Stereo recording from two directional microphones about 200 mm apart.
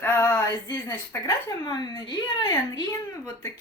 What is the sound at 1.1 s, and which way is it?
A woman's voice, 10° left (ahead or behind).